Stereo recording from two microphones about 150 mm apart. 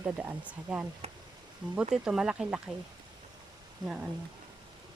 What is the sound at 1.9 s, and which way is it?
Speech, 5° right (ahead or behind).